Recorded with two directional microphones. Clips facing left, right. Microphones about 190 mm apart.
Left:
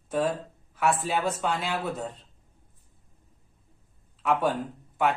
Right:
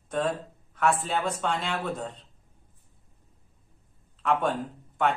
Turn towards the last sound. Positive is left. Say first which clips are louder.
# left 1 dB
turn(degrees=5)  # may be behind; listen again after turning